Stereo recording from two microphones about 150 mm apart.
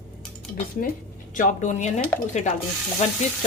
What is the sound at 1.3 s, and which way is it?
A woman's voice, 50° left (ahead or behind).